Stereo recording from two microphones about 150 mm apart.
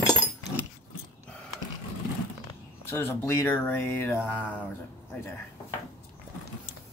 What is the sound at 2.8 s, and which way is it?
Speech, 15° left (ahead or behind).